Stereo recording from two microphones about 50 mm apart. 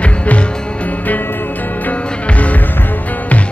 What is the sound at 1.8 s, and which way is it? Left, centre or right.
Music, left.